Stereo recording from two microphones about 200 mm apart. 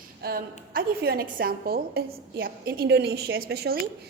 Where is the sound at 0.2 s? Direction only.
50° right (ahead or behind).